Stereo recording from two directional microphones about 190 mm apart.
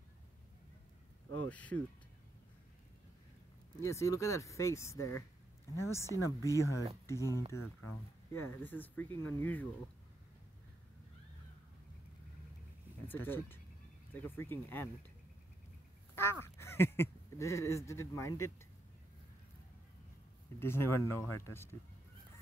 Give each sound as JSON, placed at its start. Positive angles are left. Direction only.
{"t": 1.5, "sound": "speech", "side_deg": 5}
{"t": 3.8, "sound": "speech", "side_deg": 15}
{"t": 13.0, "sound": "speech", "side_deg": 10}
{"t": 16.2, "sound": "speech", "side_deg": 15}
{"t": 20.5, "sound": "speech", "side_deg": 10}